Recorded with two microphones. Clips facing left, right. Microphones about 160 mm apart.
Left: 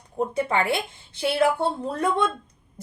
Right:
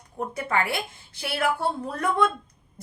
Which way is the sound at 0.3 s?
25° left (ahead or behind).